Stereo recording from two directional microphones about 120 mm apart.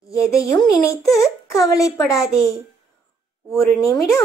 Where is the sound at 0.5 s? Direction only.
25° left (ahead or behind).